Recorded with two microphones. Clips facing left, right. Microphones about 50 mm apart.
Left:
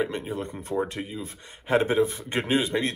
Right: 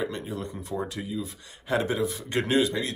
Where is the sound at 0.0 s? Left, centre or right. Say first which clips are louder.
Left 3 dB; left.